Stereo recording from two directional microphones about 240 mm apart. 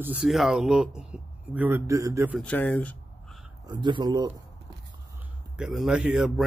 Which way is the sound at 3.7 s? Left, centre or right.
Centre.